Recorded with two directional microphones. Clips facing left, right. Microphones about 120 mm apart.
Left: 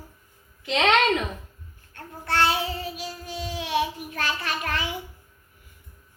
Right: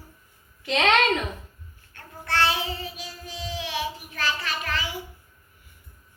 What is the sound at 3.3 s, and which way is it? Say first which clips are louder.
Child singing: left 4 dB; 55° left (ahead or behind).